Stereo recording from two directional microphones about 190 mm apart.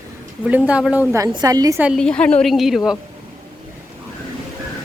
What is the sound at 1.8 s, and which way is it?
A woman's voice, centre (ahead or behind).